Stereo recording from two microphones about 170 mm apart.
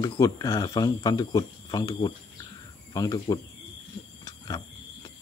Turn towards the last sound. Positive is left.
turn(degrees=20)  # may be behind; listen again after turning